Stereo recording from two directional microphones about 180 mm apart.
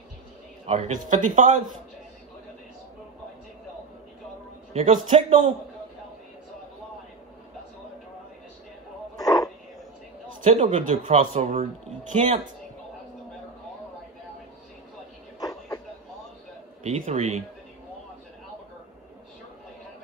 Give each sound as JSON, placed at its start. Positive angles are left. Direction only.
{"t": 0.7, "sound": "speech", "side_deg": -40}
{"t": 4.7, "sound": "speech", "side_deg": -35}
{"t": 9.1, "sound": "a sound", "side_deg": 20}
{"t": 10.4, "sound": "speech", "side_deg": -35}
{"t": 16.8, "sound": "speech", "side_deg": -40}